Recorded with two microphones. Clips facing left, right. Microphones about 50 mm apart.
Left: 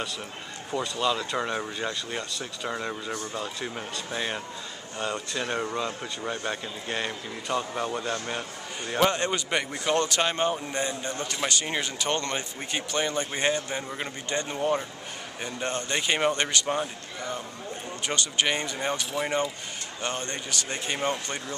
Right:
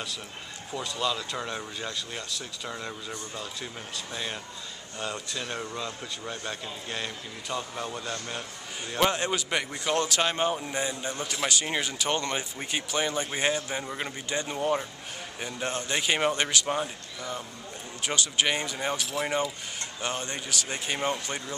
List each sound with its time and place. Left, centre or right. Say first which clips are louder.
0.7 s a man's voice: left 3 dB; centre
9.0 s speech: left 1 dB; centre
13.8 s speech: left 1 dB; centre
18.0 s speech: even; centre